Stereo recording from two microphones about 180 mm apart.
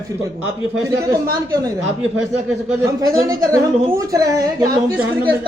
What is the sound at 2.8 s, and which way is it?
Speech, 20° right (ahead or behind).